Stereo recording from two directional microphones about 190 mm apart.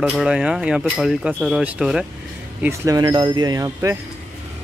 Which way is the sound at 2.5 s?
15° right (ahead or behind).